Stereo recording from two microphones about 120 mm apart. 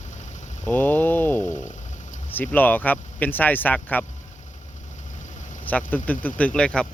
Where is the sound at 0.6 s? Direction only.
15° left (ahead or behind).